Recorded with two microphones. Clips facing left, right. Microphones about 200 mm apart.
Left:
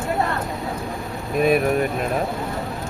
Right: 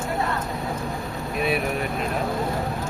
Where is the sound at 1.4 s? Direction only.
45° left (ahead or behind).